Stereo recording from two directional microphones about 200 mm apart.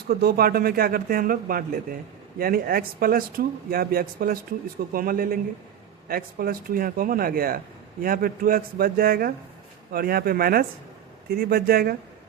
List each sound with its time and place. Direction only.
0.1 s speech: 50° right (ahead or behind)